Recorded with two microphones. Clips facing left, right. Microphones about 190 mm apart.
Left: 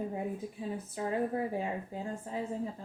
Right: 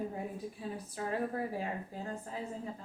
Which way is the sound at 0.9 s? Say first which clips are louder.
Left 3 dB; 25° left (ahead or behind).